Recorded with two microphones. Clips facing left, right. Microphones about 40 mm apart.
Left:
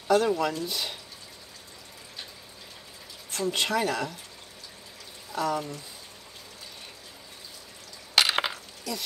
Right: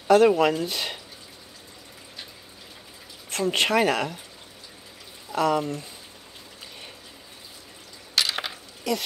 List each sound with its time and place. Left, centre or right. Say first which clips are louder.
0.1 s speech: right 6 dB; right
3.3 s speech: right 5 dB; right
5.3 s speech: right 6 dB; right
8.1 s a sound: left 3 dB; left